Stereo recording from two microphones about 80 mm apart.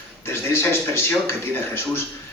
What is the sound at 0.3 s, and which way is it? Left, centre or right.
Speech, left.